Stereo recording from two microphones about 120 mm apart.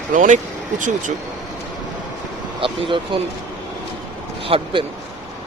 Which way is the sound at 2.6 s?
45° right (ahead or behind).